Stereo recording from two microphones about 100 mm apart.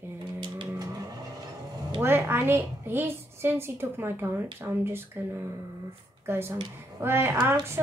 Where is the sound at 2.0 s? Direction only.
20° right (ahead or behind).